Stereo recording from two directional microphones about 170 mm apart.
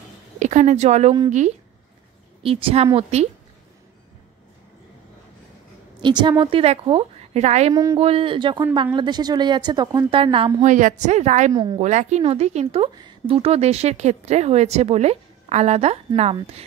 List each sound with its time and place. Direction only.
0.4 s speech: 45° right (ahead or behind)
2.4 s speech: 35° right (ahead or behind)
6.0 s speech: 25° right (ahead or behind)
7.7 s a woman's voice: 20° right (ahead or behind)
8.0 s a woman's voice: 35° right (ahead or behind)
10.6 s speech: 50° right (ahead or behind)
11.5 s a woman's voice: 25° right (ahead or behind)
11.8 s speech: 45° right (ahead or behind)